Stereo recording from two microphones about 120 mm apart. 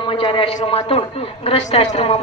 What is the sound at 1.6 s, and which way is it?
Speech, 70° left (ahead or behind).